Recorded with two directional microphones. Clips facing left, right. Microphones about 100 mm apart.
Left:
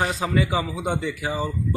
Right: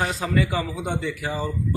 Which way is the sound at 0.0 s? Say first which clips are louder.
Left 1 dB; 10° left (ahead or behind).